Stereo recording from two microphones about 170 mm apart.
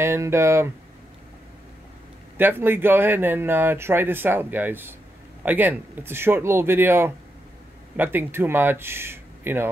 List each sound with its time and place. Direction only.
0.0 s speech: 15° right (ahead or behind)
2.3 s speech: 10° right (ahead or behind)